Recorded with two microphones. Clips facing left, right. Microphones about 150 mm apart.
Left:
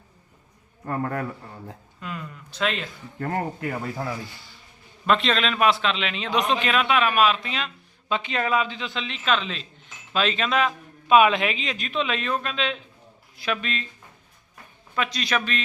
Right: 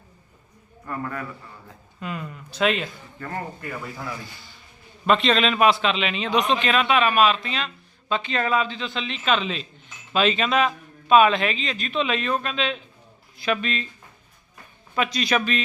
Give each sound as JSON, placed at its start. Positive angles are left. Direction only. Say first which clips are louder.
{"t": 0.9, "sound": "a man's voice", "louder": "left 4 dB", "side_deg": 50}
{"t": 2.0, "sound": "a sound", "louder": "right 4 dB", "side_deg": -5}
{"t": 3.2, "sound": "speech", "louder": "left 5 dB", "side_deg": 45}
{"t": 5.0, "sound": "a man's voice", "louder": "right 2 dB", "side_deg": 0}
{"t": 14.9, "sound": "a man's voice", "louder": "right 3 dB", "side_deg": -5}